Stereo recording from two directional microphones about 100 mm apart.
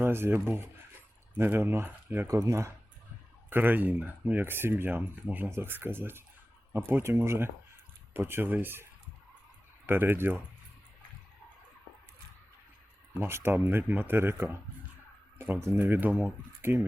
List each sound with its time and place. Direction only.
0.0 s speech: 25° right (ahead or behind)
2.2 s speech: 35° right (ahead or behind)
3.5 s speech: 20° right (ahead or behind)
13.1 s speech: 25° right (ahead or behind)
15.6 s speech: 25° right (ahead or behind)